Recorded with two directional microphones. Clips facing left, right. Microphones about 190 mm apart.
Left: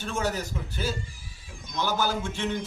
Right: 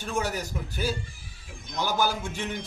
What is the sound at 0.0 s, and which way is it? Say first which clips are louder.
A man's voice: even; 10° right (ahead or behind).